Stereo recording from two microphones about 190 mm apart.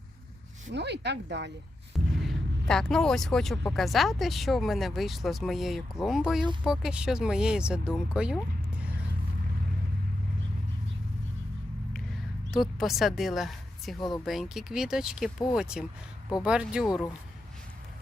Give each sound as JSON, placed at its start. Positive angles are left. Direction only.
{"t": 0.7, "sound": "speech", "side_deg": -65}
{"t": 2.2, "sound": "speech", "side_deg": 5}
{"t": 11.9, "sound": "a sound", "side_deg": 0}
{"t": 14.3, "sound": "speech", "side_deg": 0}